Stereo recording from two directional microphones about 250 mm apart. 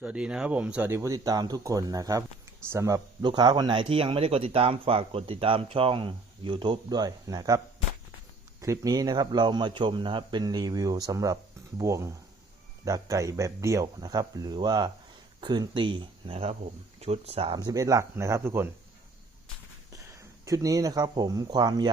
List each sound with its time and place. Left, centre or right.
0.0 s speech: centre
8.6 s speech: centre
20.1 s speech: centre